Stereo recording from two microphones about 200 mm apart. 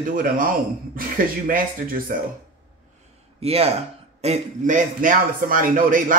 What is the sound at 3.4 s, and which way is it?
A man's voice, 30° right (ahead or behind).